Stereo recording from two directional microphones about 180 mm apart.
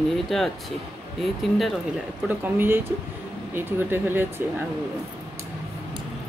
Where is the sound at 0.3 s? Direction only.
Centre (ahead or behind).